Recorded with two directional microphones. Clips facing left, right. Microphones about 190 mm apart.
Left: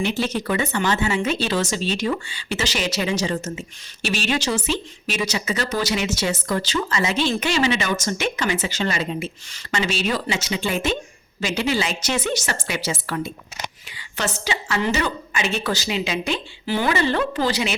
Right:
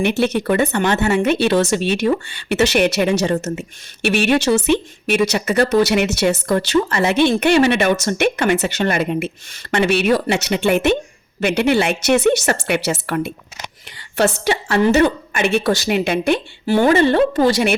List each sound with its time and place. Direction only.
0.0 s a woman's voice: 65° right (ahead or behind)